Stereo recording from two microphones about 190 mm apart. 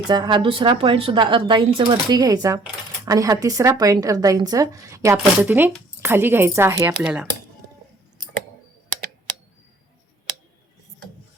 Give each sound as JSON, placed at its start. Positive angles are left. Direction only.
{"t": 0.1, "sound": "a woman's voice", "side_deg": -25}